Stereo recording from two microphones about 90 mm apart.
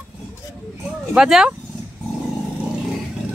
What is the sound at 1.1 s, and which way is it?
Speech, 10° right (ahead or behind).